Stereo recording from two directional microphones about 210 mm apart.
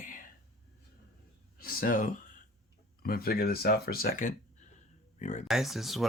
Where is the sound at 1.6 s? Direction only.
45° left (ahead or behind).